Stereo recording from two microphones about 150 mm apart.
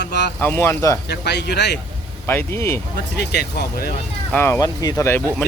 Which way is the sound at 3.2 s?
90° left.